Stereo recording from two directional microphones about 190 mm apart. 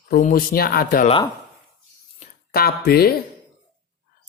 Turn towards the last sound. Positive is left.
turn(degrees=50)  # may be behind; listen again after turning